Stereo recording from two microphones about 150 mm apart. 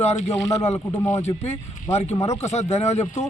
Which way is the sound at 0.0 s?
45° left (ahead or behind).